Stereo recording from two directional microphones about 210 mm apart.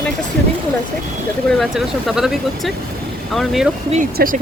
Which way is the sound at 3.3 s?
Centre (ahead or behind).